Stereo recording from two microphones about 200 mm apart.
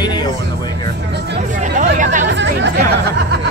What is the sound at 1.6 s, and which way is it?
Hubbub, 40° right (ahead or behind).